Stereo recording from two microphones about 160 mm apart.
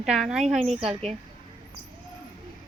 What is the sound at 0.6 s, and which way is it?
Speech, 40° right (ahead or behind).